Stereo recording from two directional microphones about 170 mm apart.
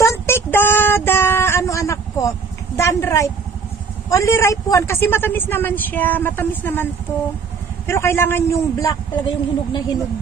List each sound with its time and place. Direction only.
0.0 s child singing: 15° left (ahead or behind)
4.1 s speech: 15° left (ahead or behind)